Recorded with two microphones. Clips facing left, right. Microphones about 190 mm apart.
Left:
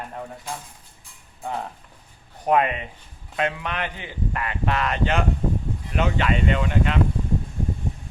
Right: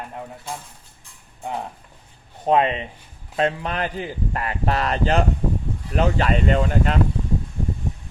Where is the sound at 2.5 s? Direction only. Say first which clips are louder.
Right 2 dB; 25° right (ahead or behind).